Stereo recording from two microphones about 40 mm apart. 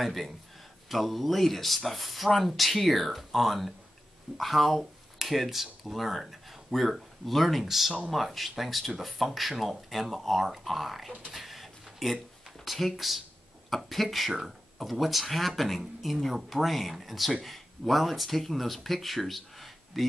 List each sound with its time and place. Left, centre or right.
0.0 s speech: centre
11.3 s a sound: centre
12.6 s speech: centre